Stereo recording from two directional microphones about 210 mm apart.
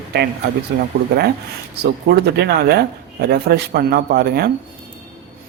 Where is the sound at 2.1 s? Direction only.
50° right (ahead or behind).